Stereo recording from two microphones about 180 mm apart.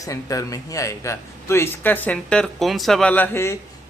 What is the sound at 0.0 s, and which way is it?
A man's voice, 20° left (ahead or behind).